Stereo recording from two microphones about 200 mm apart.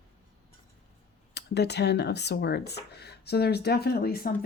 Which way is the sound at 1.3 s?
55° left (ahead or behind).